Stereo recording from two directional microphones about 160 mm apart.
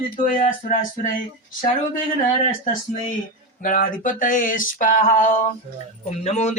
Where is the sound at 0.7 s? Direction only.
55° left (ahead or behind).